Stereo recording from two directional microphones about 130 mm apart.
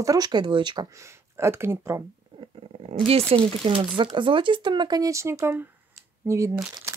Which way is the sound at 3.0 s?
45° right (ahead or behind).